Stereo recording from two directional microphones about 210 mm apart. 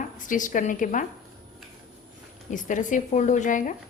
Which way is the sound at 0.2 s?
40° left (ahead or behind).